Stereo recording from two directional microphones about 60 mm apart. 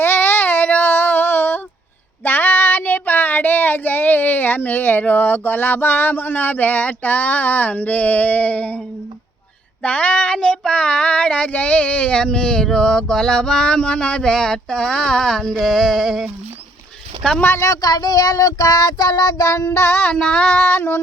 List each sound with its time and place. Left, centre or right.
0.0 s child singing: left
9.8 s speech: left
10.7 s a sound: centre
17.2 s a sound: centre
17.6 s child singing: left
19.5 s child singing: left
20.0 s a sound: centre
20.5 s speech: centre
20.7 s female singing: left